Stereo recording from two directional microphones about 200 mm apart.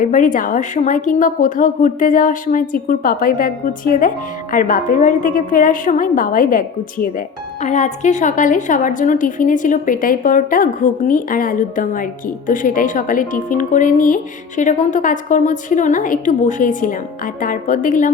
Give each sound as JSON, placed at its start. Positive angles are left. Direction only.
{"t": 0.0, "sound": "a woman's voice", "side_deg": 40}